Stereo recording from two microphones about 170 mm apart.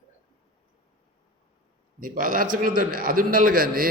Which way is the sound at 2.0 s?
55° right (ahead or behind).